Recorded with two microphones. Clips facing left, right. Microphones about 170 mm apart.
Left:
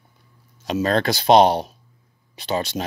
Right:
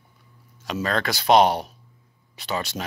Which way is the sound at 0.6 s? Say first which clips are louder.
Left 5 dB; 25° left (ahead or behind).